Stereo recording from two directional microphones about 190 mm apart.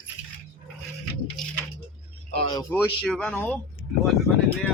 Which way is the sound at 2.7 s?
5° left (ahead or behind).